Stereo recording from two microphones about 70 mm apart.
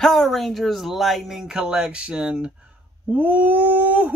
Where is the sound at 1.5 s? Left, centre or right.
Centre.